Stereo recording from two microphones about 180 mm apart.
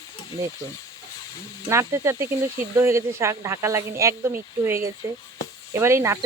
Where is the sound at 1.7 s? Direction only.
15° right (ahead or behind).